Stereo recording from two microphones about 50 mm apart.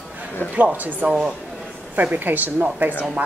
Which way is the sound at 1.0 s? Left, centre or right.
Right.